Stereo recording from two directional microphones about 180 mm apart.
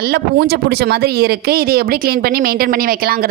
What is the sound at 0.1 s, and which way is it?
Speech, 60° right (ahead or behind).